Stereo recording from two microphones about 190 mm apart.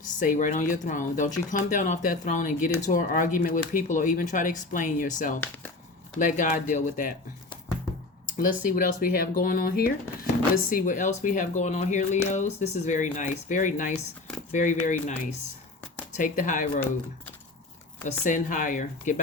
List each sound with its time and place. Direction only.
0.2 s speech: 45° left (ahead or behind)
8.6 s speech: 50° left (ahead or behind)
18.0 s speech: 45° left (ahead or behind)